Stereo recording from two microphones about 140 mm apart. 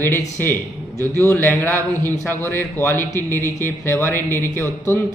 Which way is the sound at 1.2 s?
15° left (ahead or behind).